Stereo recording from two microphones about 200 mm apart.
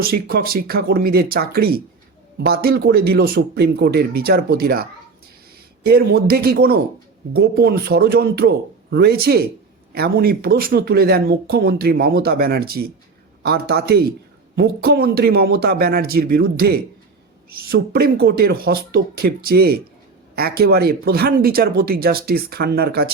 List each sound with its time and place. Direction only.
0.0 s speech: 50° right (ahead or behind)